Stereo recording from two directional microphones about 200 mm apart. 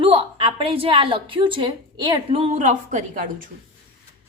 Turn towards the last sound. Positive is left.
turn(degrees=-40)  # may be behind; listen again after turning